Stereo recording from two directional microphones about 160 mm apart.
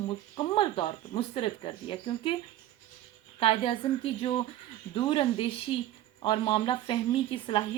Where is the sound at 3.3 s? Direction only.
35° left (ahead or behind).